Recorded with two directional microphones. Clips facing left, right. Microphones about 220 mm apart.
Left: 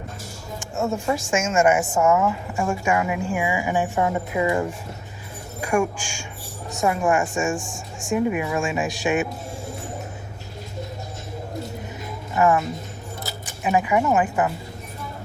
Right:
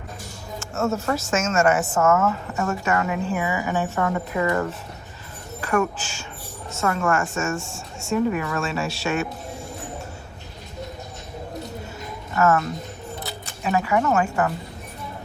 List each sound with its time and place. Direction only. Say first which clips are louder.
0.6 s speech: right 1 dB; 15° left (ahead or behind)
12.3 s speech: left 1 dB; 15° left (ahead or behind)